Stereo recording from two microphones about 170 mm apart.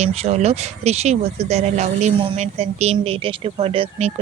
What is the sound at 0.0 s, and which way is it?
Speech, 40° right (ahead or behind).